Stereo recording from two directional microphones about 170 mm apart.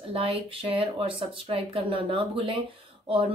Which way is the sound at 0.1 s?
35° right (ahead or behind).